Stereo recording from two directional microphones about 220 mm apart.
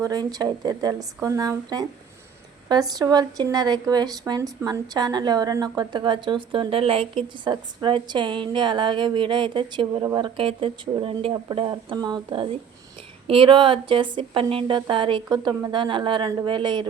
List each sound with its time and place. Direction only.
0.0 s speech: 15° right (ahead or behind)